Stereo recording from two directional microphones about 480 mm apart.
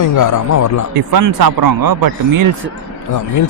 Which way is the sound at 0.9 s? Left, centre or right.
Right.